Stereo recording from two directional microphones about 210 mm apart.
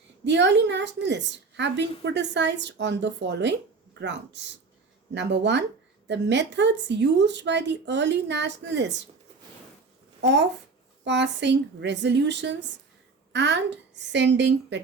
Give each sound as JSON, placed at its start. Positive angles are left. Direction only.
{"t": 0.3, "sound": "a woman's voice", "side_deg": -55}
{"t": 10.2, "sound": "a woman's voice", "side_deg": -55}